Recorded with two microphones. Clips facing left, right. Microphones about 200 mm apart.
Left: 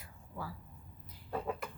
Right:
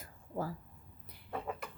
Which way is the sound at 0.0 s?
45° right (ahead or behind).